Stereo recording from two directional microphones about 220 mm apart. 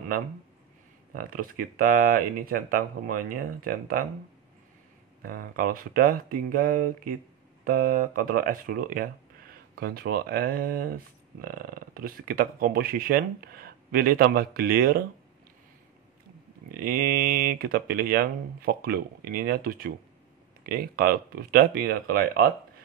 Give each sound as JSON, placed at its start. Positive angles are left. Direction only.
{"t": 1.1, "sound": "speech", "side_deg": -40}
{"t": 5.2, "sound": "speech", "side_deg": -40}
{"t": 16.7, "sound": "speech", "side_deg": -40}